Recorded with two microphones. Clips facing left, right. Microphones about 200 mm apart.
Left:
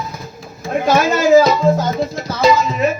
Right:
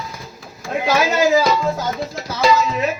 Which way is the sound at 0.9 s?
50° left (ahead or behind).